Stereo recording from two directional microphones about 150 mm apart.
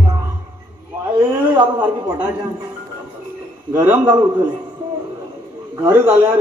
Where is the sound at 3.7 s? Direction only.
15° right (ahead or behind).